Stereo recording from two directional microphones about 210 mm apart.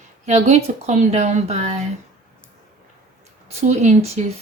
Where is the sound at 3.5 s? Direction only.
30° right (ahead or behind).